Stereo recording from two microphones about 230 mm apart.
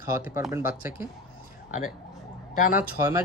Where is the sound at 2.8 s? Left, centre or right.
Centre.